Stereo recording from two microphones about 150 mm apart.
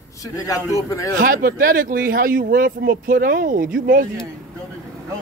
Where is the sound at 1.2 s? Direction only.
70° right (ahead or behind).